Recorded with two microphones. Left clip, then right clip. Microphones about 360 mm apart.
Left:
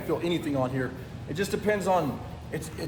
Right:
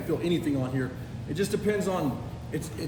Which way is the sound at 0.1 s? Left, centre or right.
Centre.